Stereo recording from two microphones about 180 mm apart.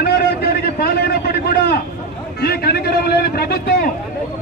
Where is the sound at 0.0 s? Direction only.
60° left (ahead or behind).